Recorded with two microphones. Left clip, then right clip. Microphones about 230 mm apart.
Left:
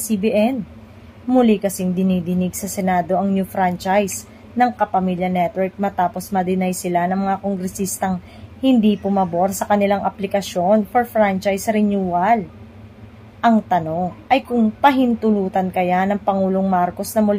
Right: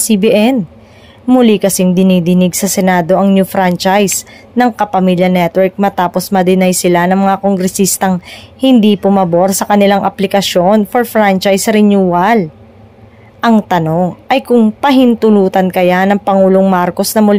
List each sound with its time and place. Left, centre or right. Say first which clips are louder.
0.1 s speech: right 8 dB; right